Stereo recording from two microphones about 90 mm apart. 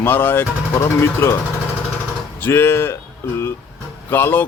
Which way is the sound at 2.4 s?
25° left (ahead or behind).